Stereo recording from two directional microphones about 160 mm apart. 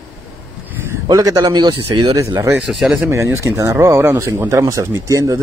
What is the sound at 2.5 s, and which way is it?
Speech, 5° right (ahead or behind).